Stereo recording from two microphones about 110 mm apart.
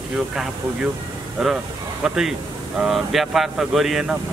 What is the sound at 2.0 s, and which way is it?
Speech, 5° right (ahead or behind).